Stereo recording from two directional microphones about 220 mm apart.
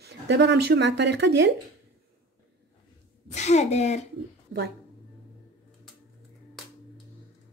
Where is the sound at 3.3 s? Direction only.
30° left (ahead or behind).